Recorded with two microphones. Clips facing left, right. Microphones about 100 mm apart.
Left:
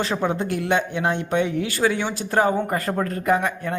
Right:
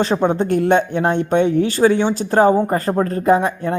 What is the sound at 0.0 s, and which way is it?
Speech, 35° right (ahead or behind).